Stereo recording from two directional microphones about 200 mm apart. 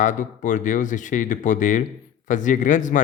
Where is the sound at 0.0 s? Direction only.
40° left (ahead or behind).